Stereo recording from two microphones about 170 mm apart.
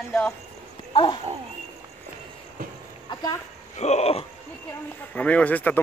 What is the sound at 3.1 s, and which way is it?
Speech, 25° left (ahead or behind).